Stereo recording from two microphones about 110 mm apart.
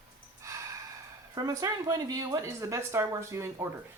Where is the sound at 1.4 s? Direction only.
35° right (ahead or behind).